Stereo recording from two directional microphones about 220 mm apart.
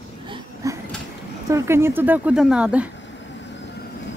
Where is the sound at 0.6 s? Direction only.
15° right (ahead or behind).